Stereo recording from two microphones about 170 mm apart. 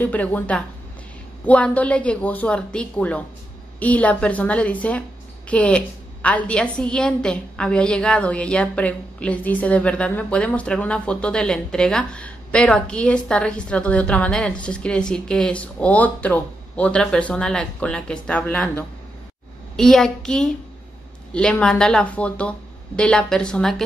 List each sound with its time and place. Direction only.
0.0 s a woman's voice: 10° left (ahead or behind)